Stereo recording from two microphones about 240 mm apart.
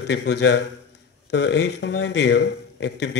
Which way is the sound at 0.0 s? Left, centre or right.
Left.